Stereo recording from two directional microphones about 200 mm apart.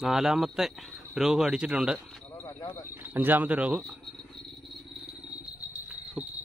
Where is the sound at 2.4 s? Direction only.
20° left (ahead or behind).